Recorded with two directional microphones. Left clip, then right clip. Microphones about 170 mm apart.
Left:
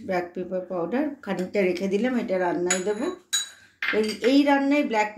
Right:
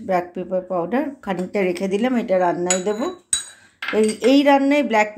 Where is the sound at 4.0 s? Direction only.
60° right (ahead or behind).